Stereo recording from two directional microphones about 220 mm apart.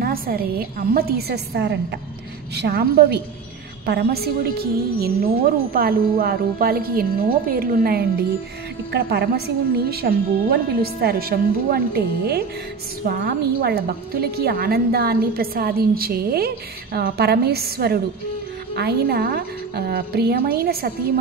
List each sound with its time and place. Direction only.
0.0 s a woman's voice: 45° right (ahead or behind)